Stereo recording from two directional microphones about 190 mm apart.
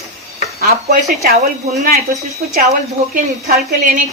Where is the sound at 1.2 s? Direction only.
50° right (ahead or behind).